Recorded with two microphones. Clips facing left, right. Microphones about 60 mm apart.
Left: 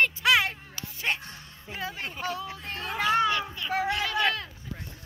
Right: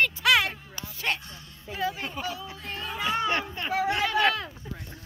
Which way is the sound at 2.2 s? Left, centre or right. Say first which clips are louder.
Left 2 dB; left.